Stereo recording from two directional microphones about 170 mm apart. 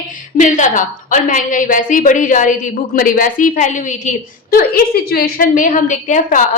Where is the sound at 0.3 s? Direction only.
45° left (ahead or behind).